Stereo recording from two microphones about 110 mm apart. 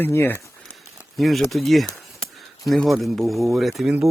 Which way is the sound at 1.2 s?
Centre (ahead or behind).